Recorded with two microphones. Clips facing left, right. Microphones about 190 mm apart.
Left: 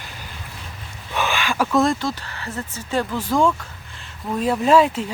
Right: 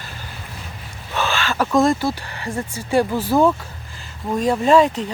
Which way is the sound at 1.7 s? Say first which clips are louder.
Right 3 dB; centre (ahead or behind).